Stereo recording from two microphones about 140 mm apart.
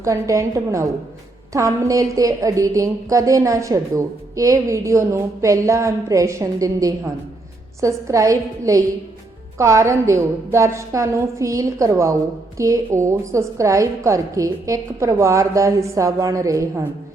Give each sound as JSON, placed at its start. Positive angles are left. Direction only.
{"t": 0.0, "sound": "a woman's voice", "side_deg": -20}